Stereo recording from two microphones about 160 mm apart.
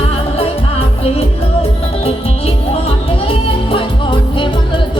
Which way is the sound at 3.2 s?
35° left (ahead or behind).